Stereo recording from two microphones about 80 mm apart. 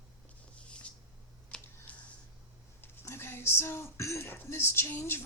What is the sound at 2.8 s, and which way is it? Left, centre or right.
Speech, left.